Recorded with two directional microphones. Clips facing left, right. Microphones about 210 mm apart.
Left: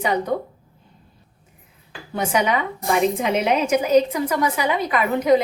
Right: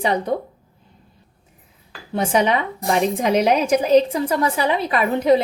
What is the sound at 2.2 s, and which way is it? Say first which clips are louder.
A woman's voice: right 2 dB; 30° right (ahead or behind).